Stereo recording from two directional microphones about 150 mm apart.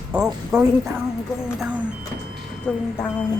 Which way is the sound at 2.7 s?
5° left (ahead or behind).